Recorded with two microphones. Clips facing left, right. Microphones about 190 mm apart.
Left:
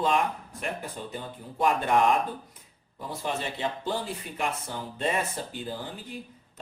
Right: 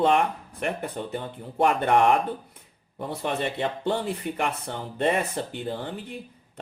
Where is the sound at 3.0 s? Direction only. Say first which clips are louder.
Right 4 dB; 60° right (ahead or behind).